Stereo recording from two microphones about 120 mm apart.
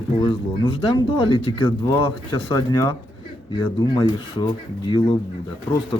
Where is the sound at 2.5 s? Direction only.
25° left (ahead or behind).